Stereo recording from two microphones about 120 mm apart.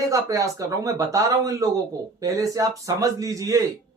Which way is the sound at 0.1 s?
30° right (ahead or behind).